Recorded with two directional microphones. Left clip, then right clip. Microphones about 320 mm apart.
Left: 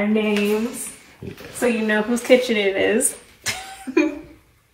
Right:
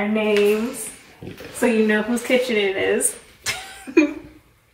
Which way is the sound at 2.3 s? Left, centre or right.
Centre.